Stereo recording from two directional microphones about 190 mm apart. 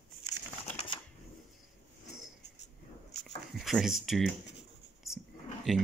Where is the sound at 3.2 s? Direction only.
Centre (ahead or behind).